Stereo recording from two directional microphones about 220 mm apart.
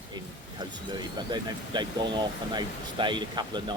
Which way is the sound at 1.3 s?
20° right (ahead or behind).